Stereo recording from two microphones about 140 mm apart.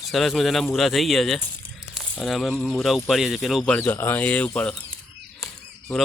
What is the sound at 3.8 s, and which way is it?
Speech, 15° left (ahead or behind).